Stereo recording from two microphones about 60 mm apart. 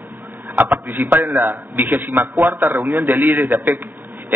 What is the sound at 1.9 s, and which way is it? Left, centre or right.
A man's voice, right.